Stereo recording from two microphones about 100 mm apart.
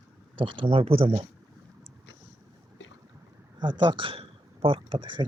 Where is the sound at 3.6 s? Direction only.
55° right (ahead or behind).